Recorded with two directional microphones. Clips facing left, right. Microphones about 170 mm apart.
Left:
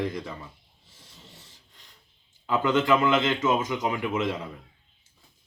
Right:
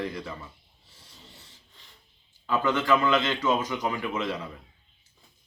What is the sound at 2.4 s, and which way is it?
Speech, 20° left (ahead or behind).